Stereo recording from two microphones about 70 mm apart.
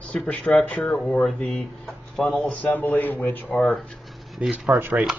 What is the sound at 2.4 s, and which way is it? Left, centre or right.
Speech, left.